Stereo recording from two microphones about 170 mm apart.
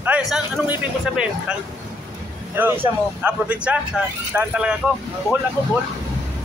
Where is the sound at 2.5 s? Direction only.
10° right (ahead or behind).